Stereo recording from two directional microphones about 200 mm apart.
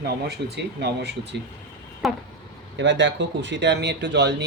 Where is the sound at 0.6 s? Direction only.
60° right (ahead or behind).